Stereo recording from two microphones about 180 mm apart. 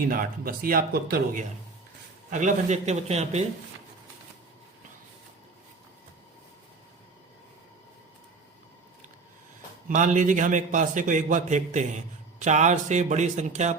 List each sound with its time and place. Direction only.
0.0 s a man's voice: 50° right (ahead or behind)
9.9 s a man's voice: 45° right (ahead or behind)